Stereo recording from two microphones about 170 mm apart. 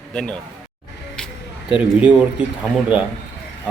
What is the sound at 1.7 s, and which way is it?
Speech, 5° right (ahead or behind).